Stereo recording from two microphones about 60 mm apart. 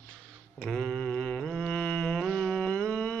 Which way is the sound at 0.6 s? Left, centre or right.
Centre.